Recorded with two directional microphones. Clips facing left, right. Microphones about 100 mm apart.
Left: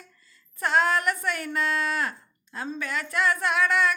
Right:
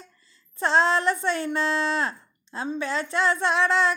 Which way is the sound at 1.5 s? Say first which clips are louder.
Right 2 dB; 25° right (ahead or behind).